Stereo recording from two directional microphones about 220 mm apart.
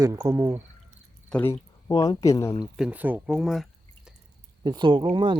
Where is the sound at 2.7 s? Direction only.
5° right (ahead or behind).